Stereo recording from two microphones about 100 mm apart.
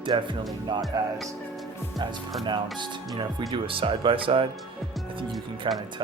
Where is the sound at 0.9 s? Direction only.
35° right (ahead or behind).